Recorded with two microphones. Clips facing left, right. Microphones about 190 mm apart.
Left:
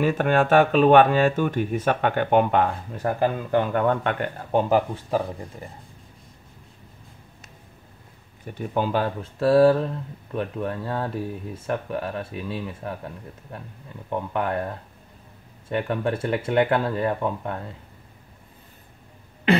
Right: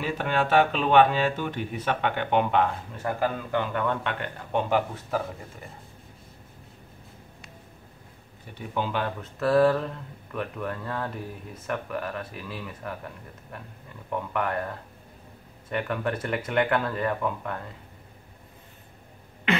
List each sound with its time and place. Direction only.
0.0 s speech: 50° left (ahead or behind); by 5.2 s 35° left (ahead or behind)
8.5 s speech: 45° left (ahead or behind); by 12.9 s 30° left (ahead or behind)
14.1 s speech: 30° left (ahead or behind)
15.7 s speech: 30° left (ahead or behind)